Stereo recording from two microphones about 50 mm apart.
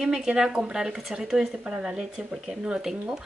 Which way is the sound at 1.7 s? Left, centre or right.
Right.